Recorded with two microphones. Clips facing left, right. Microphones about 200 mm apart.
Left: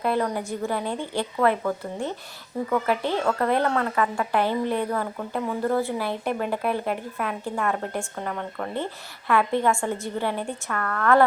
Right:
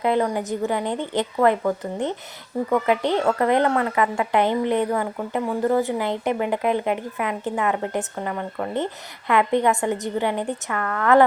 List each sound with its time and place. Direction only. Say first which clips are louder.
0.0 s a woman's voice: right 3 dB; 15° right (ahead or behind)